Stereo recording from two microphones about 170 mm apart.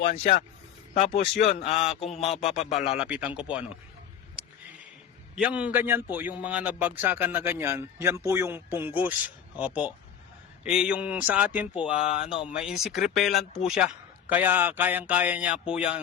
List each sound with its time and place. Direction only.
0.0 s speech: 45° left (ahead or behind)
3.0 s speech: 5° right (ahead or behind)
4.4 s a sound: 5° right (ahead or behind)
5.3 s speech: 5° right (ahead or behind)
11.9 s speech: 35° left (ahead or behind)
12.5 s speech: 5° right (ahead or behind)